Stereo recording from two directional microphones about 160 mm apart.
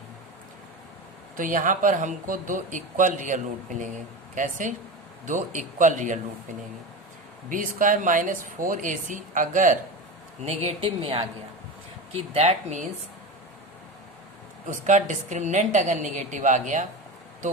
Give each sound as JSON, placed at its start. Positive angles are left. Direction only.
{"t": 1.4, "sound": "speech", "side_deg": -55}
{"t": 7.5, "sound": "speech", "side_deg": -55}
{"t": 10.4, "sound": "speech", "side_deg": -40}
{"t": 12.3, "sound": "speech", "side_deg": -40}
{"t": 14.7, "sound": "speech", "side_deg": -50}